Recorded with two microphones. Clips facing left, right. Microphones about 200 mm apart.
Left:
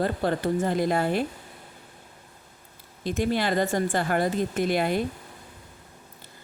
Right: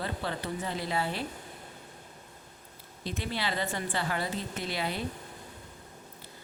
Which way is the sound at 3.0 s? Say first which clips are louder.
Left 9 dB; 45° left (ahead or behind).